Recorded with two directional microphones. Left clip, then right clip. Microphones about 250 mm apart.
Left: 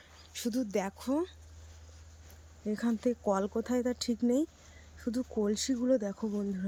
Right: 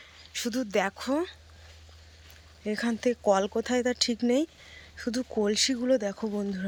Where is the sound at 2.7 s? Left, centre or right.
Centre.